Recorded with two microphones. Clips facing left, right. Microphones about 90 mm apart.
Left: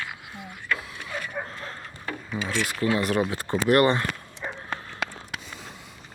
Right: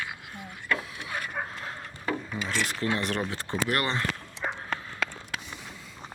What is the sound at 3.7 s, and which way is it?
Speech, 50° left (ahead or behind).